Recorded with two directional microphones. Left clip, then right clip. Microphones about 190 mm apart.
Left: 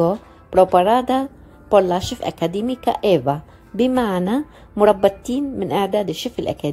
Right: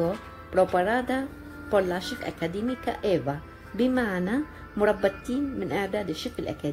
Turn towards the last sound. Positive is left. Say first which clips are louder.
# left 9 dB
turn(degrees=20)  # may be behind; listen again after turning